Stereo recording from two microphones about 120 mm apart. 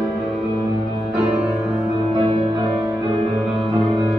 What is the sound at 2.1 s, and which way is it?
Music, 45° right (ahead or behind).